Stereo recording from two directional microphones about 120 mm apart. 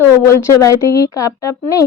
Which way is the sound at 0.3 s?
25° left (ahead or behind).